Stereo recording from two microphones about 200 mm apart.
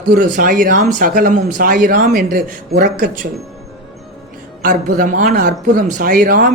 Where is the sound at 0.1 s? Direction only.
45° right (ahead or behind).